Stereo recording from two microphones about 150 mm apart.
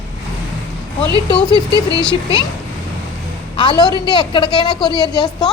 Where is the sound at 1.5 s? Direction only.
25° right (ahead or behind).